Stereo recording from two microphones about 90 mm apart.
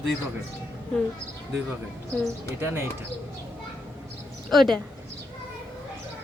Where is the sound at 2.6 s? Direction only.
25° right (ahead or behind).